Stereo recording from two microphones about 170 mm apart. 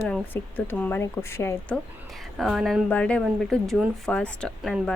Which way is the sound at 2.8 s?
5° left (ahead or behind).